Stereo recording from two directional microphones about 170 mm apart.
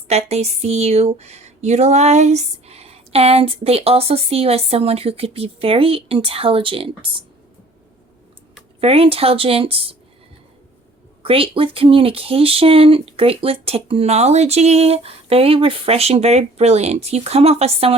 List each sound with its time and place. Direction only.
0.1 s speech: 40° right (ahead or behind)
8.8 s speech: 35° right (ahead or behind)
11.2 s speech: 35° right (ahead or behind)